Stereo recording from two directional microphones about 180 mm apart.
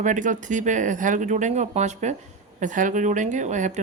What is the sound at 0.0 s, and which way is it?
Speech, 45° right (ahead or behind).